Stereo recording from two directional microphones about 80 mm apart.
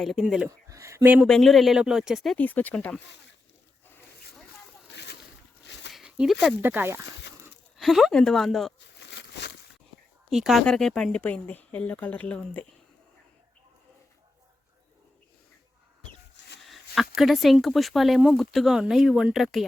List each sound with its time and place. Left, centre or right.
0.0 s speech: centre
0.7 s speech: right
1.3 s speech: centre
2.4 s speech: left
5.9 s a sound: centre
6.6 s speech: right
7.8 s speech: centre
10.2 s speech: centre
10.6 s speech: centre
16.6 s speech: centre